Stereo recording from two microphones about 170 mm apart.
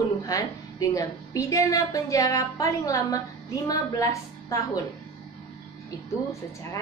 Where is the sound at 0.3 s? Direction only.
20° left (ahead or behind).